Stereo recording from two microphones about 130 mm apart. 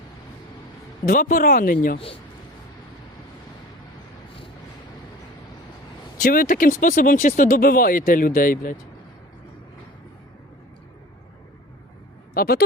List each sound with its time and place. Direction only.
1.0 s speech: 90° left
6.2 s speech: 90° left